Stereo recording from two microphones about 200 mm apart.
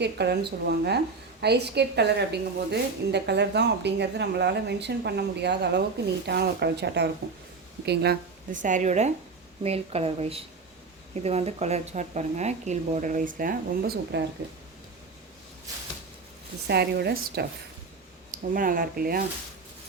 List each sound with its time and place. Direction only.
0.0 s a woman's voice: 55° right (ahead or behind)
16.6 s speech: 55° right (ahead or behind)